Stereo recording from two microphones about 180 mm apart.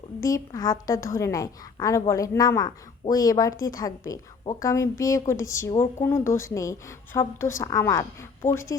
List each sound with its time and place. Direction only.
0.2 s a woman's voice: 20° left (ahead or behind)